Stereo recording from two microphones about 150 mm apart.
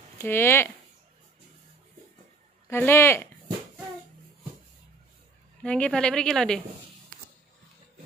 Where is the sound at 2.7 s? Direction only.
15° left (ahead or behind).